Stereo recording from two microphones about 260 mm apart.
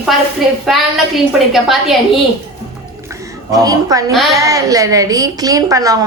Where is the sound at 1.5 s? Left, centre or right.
Centre.